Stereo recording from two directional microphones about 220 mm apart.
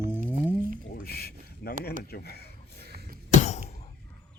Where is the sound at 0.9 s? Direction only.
45° left (ahead or behind).